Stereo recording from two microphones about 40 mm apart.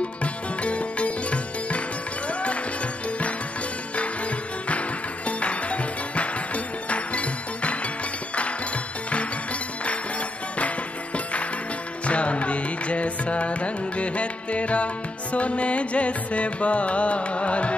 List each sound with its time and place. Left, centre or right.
0.2 s sitar: left
2.2 s music: left
4.6 s music: left
12.1 s music: left